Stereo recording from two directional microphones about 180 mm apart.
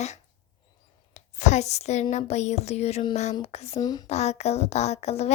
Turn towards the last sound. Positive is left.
turn(degrees=35)  # may be behind; listen again after turning